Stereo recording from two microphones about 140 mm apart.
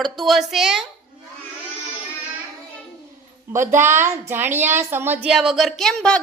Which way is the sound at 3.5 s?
20° right (ahead or behind).